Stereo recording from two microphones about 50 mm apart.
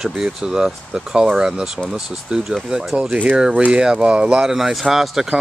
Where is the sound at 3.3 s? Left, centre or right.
Centre.